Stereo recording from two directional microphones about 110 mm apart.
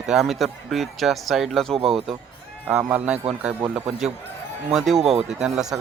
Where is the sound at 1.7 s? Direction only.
65° right (ahead or behind).